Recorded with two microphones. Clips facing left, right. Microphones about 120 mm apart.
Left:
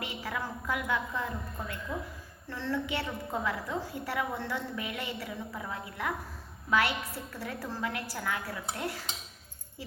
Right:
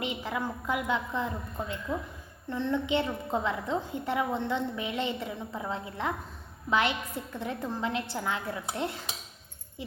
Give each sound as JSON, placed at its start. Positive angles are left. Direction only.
{"t": 0.0, "sound": "a woman's voice", "side_deg": -20}